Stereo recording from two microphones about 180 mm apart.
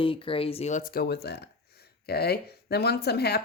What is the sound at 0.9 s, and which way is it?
Speech, 65° left (ahead or behind).